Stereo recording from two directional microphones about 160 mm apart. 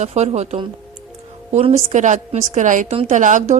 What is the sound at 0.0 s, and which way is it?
A woman's voice, 45° right (ahead or behind).